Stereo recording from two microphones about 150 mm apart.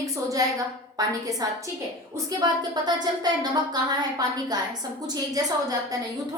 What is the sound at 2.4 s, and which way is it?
A woman's voice, 25° right (ahead or behind).